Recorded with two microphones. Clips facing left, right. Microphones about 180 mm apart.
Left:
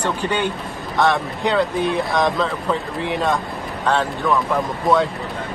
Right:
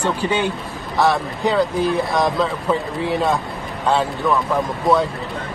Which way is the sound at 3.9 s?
10° right (ahead or behind).